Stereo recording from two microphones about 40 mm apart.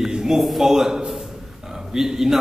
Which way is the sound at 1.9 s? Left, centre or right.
Centre.